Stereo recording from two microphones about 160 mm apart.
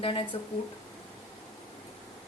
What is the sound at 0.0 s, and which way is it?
Speech, 35° left (ahead or behind).